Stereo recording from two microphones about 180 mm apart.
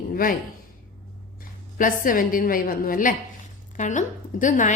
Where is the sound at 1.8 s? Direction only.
50° left (ahead or behind).